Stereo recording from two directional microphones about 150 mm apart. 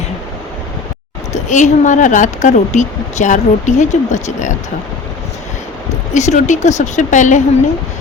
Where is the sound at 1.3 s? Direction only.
55° left (ahead or behind).